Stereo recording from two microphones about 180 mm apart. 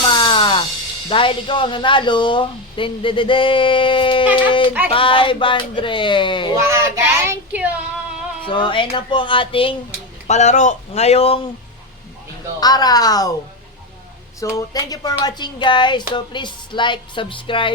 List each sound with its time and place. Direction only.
0.0 s music: 25° left (ahead or behind)
1.1 s speech: 30° left (ahead or behind)
6.6 s child singing: 15° right (ahead or behind)
8.4 s speech: 25° left (ahead or behind)
10.2 s speech: 40° left (ahead or behind)
12.5 s speech: 20° left (ahead or behind)
14.5 s speech: 20° left (ahead or behind)